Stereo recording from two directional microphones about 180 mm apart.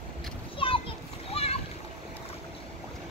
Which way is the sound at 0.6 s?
30° left (ahead or behind).